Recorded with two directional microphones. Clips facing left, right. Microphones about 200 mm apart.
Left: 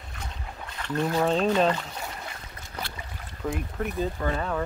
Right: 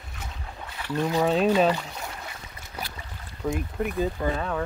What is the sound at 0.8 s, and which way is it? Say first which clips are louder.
Speech: right 1 dB; 10° right (ahead or behind).